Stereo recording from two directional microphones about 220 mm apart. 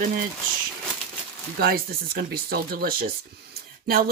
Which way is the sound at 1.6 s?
45° right (ahead or behind).